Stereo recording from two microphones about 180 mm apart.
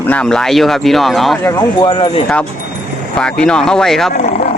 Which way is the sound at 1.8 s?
25° left (ahead or behind).